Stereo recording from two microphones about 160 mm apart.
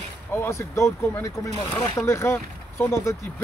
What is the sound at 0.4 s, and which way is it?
Speech, 15° left (ahead or behind).